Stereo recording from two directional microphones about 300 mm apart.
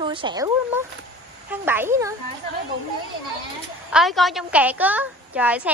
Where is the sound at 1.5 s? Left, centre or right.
Centre.